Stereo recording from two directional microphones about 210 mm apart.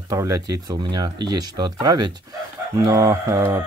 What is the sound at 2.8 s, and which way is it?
Chicken, 15° right (ahead or behind).